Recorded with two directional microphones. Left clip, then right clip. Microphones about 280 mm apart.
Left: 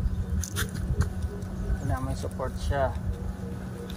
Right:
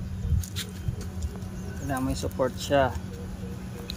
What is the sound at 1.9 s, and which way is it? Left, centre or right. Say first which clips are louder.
Speech: right 7 dB; right.